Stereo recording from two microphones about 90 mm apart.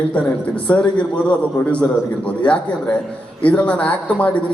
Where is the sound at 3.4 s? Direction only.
15° left (ahead or behind).